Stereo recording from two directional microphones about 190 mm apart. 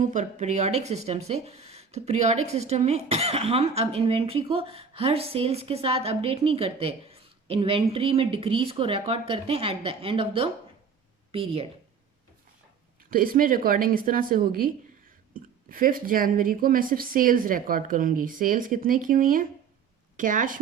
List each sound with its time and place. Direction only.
0.0 s speech: 40° right (ahead or behind)
13.1 s speech: 50° right (ahead or behind)